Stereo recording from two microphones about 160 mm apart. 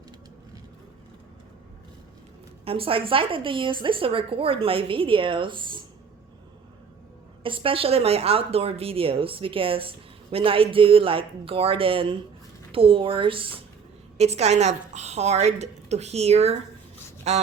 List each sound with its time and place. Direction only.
2.6 s a woman's voice: 35° right (ahead or behind)
7.4 s a woman's voice: 35° right (ahead or behind)